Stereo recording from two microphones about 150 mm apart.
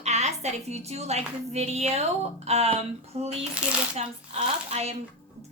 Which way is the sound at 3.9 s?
45° right (ahead or behind).